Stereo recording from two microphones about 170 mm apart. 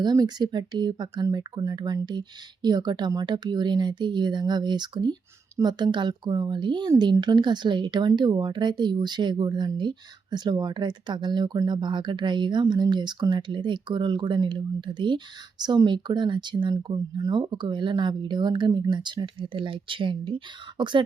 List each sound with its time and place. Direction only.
0.0 s speech: 25° right (ahead or behind)